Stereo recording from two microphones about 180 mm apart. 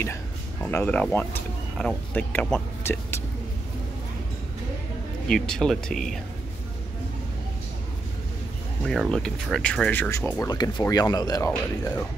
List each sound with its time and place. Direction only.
0.0 s speech: 10° left (ahead or behind)
5.3 s speech: 5° left (ahead or behind)
8.8 s speech: centre (ahead or behind)
10.4 s speech: 20° left (ahead or behind)